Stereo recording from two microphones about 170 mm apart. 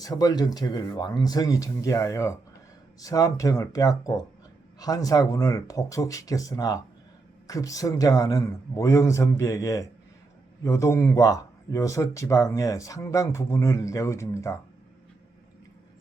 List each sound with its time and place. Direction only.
0.0 s speech: 20° left (ahead or behind)